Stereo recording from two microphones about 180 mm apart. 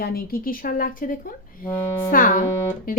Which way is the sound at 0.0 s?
55° left (ahead or behind).